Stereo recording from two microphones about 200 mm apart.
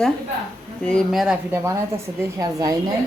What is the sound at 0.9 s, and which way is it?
Speech, centre (ahead or behind).